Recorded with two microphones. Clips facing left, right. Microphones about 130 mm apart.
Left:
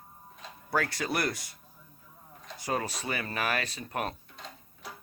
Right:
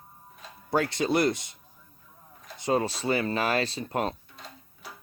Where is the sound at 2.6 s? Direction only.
25° right (ahead or behind).